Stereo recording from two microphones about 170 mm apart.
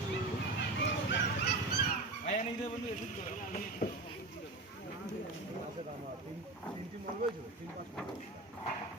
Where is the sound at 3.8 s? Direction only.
60° left (ahead or behind).